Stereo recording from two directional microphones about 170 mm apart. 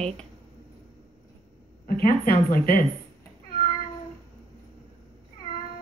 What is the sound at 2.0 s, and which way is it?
Speech, 60° left (ahead or behind).